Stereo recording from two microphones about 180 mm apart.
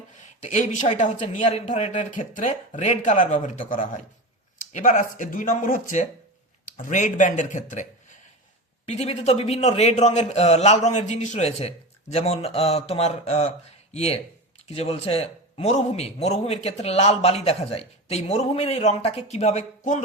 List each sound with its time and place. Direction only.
0.1 s speech: 45° left (ahead or behind)
8.9 s a man's voice: 35° left (ahead or behind)